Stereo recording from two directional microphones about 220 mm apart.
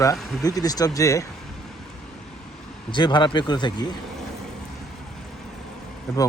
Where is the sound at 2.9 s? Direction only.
20° left (ahead or behind).